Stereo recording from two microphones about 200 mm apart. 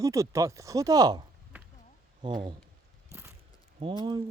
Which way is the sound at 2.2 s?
25° right (ahead or behind).